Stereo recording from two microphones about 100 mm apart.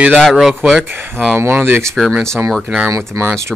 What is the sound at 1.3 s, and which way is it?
Speech, 20° right (ahead or behind).